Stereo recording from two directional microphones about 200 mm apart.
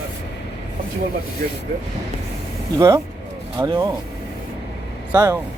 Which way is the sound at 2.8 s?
15° right (ahead or behind).